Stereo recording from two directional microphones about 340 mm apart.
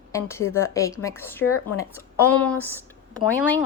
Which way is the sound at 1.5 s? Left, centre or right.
Left.